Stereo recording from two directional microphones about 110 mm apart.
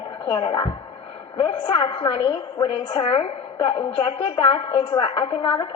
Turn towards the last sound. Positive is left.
turn(degrees=45)  # may be behind; listen again after turning